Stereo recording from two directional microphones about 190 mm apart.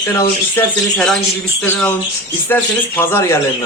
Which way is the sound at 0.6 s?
5° left (ahead or behind).